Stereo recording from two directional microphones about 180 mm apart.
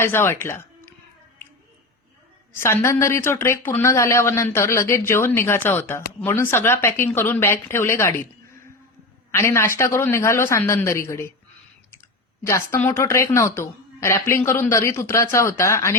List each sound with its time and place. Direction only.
0.0 s speech: 15° left (ahead or behind)
2.6 s speech: 15° left (ahead or behind)
12.4 s speech: 15° left (ahead or behind)